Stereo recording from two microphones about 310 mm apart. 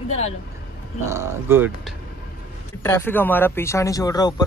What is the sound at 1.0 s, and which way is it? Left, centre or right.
Speech, centre.